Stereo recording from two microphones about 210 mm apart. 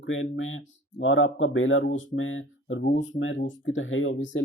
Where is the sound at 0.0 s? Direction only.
70° left (ahead or behind).